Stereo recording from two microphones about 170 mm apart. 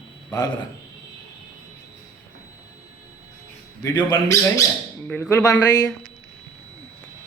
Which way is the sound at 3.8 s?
20° left (ahead or behind).